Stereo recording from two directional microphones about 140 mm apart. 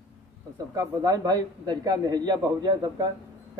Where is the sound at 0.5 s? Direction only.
25° right (ahead or behind).